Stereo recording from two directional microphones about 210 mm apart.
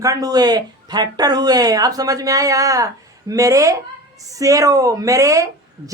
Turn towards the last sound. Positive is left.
turn(degrees=-15)  # may be behind; listen again after turning